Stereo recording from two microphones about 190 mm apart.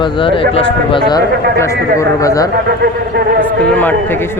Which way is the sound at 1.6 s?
15° left (ahead or behind).